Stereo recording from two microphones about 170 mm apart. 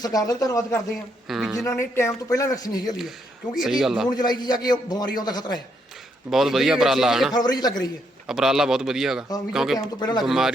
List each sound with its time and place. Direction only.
0.0 s a man's voice: 20° left (ahead or behind)
1.3 s a man's voice: centre (ahead or behind)
2.0 s a man's voice: 15° left (ahead or behind)
3.5 s a man's voice: centre (ahead or behind)
4.1 s a man's voice: 25° left (ahead or behind)
6.3 s a man's voice: centre (ahead or behind)
7.3 s a man's voice: 25° left (ahead or behind)
8.3 s a man's voice: 5° right (ahead or behind)
9.7 s a man's voice: 25° left (ahead or behind)
10.2 s a man's voice: centre (ahead or behind)